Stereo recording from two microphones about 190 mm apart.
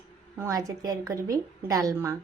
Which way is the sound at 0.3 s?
15° right (ahead or behind).